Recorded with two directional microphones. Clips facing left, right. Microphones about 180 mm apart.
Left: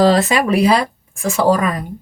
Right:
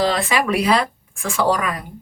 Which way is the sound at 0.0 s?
40° left (ahead or behind).